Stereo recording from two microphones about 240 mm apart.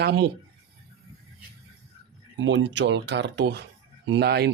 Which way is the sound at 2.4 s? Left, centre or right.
Right.